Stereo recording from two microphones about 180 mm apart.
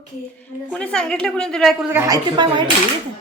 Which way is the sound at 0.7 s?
5° left (ahead or behind).